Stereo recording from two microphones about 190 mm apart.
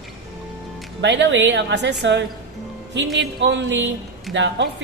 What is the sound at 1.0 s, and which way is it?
Speech, 70° right (ahead or behind).